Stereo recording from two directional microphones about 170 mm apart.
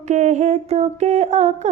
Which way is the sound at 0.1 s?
45° right (ahead or behind).